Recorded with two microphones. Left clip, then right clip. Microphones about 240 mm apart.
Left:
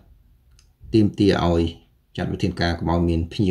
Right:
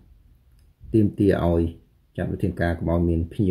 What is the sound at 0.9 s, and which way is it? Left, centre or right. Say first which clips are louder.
Speech: left 2 dB; centre.